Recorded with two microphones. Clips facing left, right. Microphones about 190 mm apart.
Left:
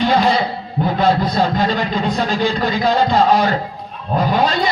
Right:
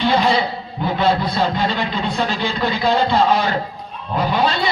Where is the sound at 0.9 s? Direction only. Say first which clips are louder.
Left 2 dB; 45° left (ahead or behind).